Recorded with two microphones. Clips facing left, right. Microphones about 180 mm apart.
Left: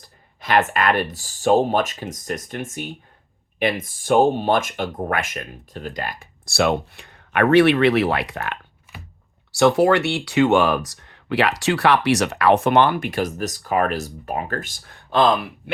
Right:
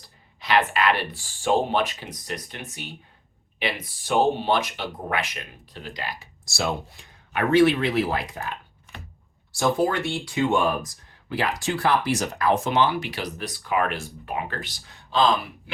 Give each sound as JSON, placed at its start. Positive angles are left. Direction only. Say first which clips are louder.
{"t": 0.3, "sound": "speech", "louder": "left 3 dB", "side_deg": 50}
{"t": 8.9, "sound": "a sound", "louder": "left 1 dB", "side_deg": 5}
{"t": 9.5, "sound": "speech", "louder": "left 7 dB", "side_deg": 75}